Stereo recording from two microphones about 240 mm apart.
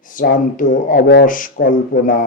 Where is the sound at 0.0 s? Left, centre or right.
Left.